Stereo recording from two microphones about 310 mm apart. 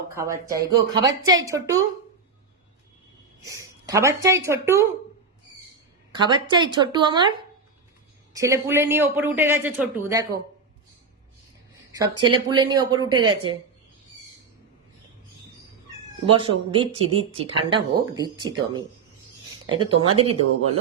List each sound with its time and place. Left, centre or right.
0.1 s speech: centre
3.4 s a woman's voice: centre
6.1 s speech: centre
12.2 s speech: centre
16.3 s speech: centre